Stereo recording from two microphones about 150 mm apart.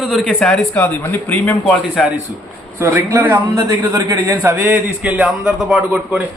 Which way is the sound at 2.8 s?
15° right (ahead or behind).